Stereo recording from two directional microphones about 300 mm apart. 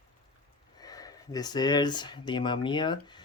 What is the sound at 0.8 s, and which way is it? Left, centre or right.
Speech, centre.